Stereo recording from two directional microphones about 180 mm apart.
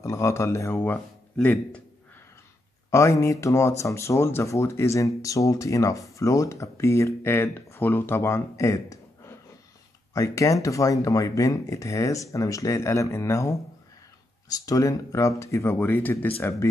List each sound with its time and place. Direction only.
0.0 s speech: 15° left (ahead or behind)
2.9 s speech: 15° left (ahead or behind)